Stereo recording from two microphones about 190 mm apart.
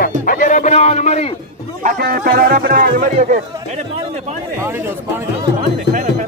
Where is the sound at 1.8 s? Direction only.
55° right (ahead or behind).